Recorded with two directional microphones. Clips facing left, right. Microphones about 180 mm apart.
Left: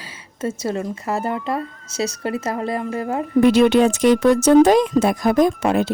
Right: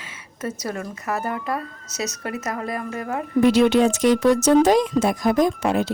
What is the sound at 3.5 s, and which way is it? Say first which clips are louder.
Speech: left 2 dB; 60° left (ahead or behind).